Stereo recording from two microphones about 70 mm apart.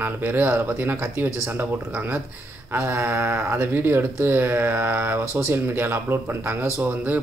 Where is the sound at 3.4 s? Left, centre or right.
Right.